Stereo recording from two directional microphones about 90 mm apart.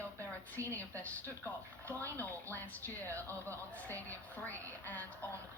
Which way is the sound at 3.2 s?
20° left (ahead or behind).